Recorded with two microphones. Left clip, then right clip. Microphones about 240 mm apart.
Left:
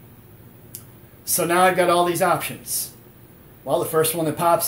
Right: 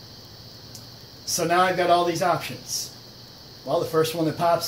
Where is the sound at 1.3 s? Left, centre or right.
Left.